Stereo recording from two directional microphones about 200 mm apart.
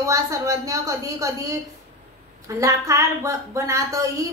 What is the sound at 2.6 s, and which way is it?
A child's voice, 15° right (ahead or behind).